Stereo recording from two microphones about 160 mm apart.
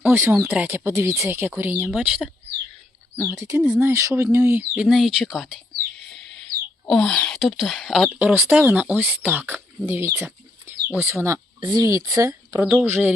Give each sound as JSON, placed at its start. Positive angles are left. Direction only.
{"t": 0.0, "sound": "speech", "side_deg": -15}
{"t": 4.7, "sound": "speech", "side_deg": -5}
{"t": 6.5, "sound": "wail", "side_deg": -70}
{"t": 6.8, "sound": "speech", "side_deg": 5}
{"t": 8.3, "sound": "speech", "side_deg": -10}